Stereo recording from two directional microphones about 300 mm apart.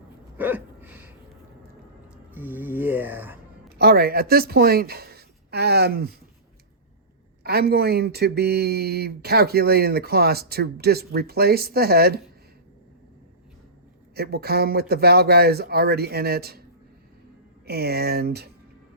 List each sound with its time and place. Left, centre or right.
0.3 s a sound: centre
2.3 s speech: centre
3.8 s speech: right
7.4 s speech: right
14.2 s speech: right
17.7 s speech: right